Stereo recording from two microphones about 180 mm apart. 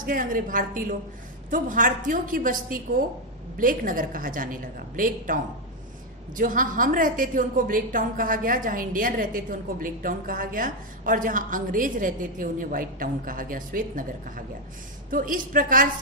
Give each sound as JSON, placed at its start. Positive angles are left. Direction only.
{"t": 0.0, "sound": "a woman's voice", "side_deg": -50}